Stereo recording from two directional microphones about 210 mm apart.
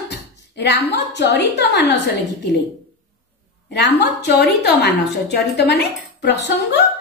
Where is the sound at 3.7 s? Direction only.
55° left (ahead or behind).